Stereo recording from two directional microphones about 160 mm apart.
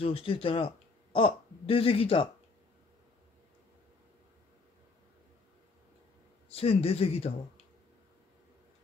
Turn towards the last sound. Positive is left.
turn(degrees=40)  # may be behind; listen again after turning